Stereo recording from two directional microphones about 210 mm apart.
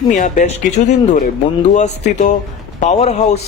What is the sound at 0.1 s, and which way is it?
Speech, 35° left (ahead or behind).